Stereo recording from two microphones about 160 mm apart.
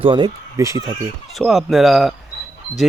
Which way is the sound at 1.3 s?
Centre (ahead or behind).